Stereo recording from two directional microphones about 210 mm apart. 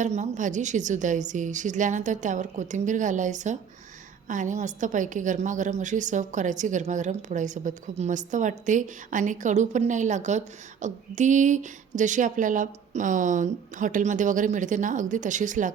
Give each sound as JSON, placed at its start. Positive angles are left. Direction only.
{"t": 0.0, "sound": "a woman's voice", "side_deg": -35}